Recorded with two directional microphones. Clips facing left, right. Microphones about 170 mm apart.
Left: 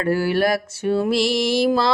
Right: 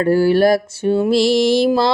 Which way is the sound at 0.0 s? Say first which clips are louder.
Right 6 dB; 30° right (ahead or behind).